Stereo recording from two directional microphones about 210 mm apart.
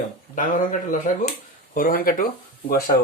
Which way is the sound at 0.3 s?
40° left (ahead or behind).